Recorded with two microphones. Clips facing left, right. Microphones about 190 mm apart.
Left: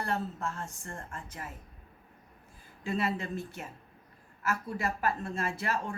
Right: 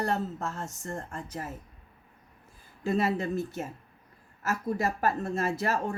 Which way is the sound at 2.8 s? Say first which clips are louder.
Right 5 dB; 40° right (ahead or behind).